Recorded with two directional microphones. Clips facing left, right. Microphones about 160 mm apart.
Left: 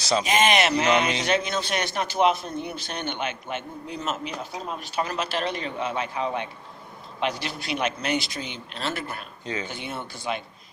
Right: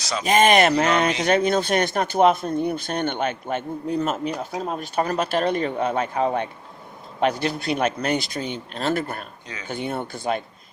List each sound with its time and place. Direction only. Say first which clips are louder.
0.3 s a man's voice: right 7 dB; 45° right (ahead or behind)